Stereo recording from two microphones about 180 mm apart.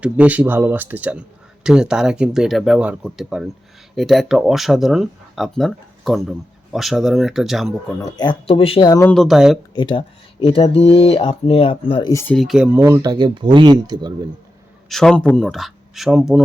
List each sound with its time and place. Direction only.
0.0 s speech: 10° right (ahead or behind)
8.1 s speech: 25° left (ahead or behind)
9.0 s speech: 10° left (ahead or behind)
9.2 s speech: centre (ahead or behind)
9.7 s speech: 25° left (ahead or behind)
12.1 s speech: 5° left (ahead or behind); by 14.1 s 25° right (ahead or behind)
14.8 s a man's voice: centre (ahead or behind)